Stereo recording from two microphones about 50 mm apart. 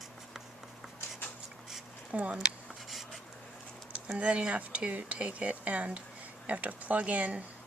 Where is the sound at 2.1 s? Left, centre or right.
Right.